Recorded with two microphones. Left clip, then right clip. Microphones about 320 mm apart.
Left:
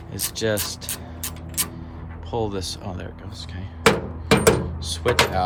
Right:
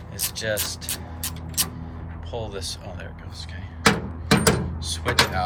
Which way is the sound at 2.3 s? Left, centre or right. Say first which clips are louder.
Left 5 dB; centre.